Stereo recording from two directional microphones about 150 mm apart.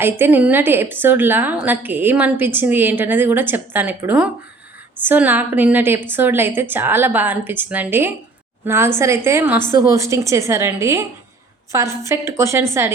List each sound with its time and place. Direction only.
0.0 s a woman's voice: 15° right (ahead or behind)